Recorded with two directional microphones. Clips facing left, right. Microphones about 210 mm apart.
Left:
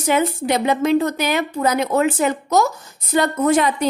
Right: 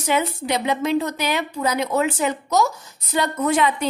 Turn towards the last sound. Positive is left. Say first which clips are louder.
# left 3 dB
turn(degrees=45)  # may be behind; listen again after turning